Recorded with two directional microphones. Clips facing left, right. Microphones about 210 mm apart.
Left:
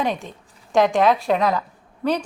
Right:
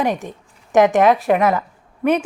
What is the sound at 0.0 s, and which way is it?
A woman's voice, 15° right (ahead or behind).